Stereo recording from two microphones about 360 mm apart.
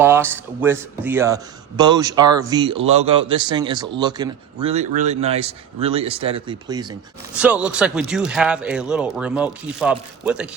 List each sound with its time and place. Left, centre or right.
0.0 s a man's voice: centre